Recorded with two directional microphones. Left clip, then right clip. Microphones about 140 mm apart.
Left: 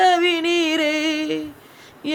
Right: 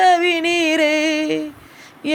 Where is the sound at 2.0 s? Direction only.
30° right (ahead or behind).